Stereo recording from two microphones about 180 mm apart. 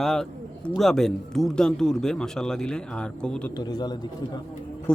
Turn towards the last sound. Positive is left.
turn(degrees=5)  # may be behind; listen again after turning